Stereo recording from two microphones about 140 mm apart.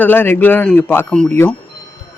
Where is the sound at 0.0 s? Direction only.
15° left (ahead or behind).